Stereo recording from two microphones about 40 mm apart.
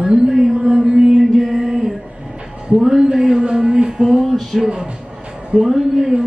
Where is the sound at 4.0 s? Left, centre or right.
Centre.